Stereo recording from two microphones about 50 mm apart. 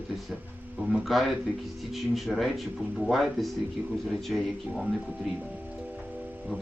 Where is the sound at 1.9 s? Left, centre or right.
Centre.